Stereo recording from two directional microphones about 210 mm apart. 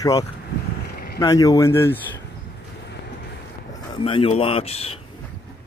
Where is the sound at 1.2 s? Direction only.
15° left (ahead or behind).